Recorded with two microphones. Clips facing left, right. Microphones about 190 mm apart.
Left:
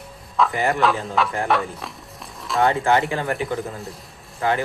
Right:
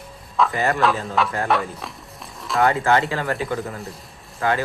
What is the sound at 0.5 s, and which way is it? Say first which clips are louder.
Speech: even; 20° left (ahead or behind).